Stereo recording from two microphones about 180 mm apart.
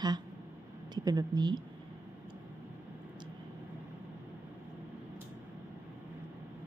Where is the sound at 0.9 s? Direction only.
20° right (ahead or behind).